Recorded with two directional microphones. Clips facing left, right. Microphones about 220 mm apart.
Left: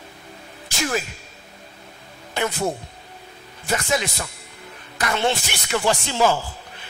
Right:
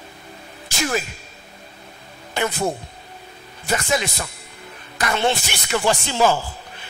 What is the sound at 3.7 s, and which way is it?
Music, 10° right (ahead or behind).